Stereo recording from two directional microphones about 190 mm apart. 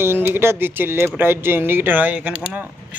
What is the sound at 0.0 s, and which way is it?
Speech, 10° right (ahead or behind).